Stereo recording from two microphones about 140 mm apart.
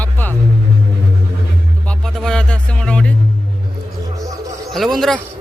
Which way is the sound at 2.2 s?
5° left (ahead or behind).